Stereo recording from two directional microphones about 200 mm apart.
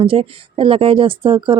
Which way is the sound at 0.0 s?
25° right (ahead or behind).